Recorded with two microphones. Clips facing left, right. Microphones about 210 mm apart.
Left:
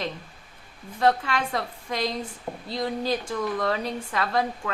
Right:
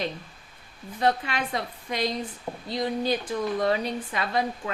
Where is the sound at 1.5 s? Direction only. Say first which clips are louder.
Left 1 dB; 25° right (ahead or behind).